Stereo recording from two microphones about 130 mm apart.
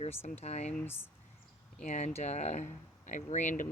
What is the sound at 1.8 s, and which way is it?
Speech, 65° left (ahead or behind).